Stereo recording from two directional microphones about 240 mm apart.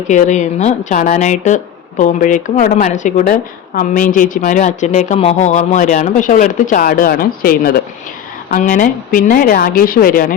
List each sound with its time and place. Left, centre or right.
0.1 s speech: left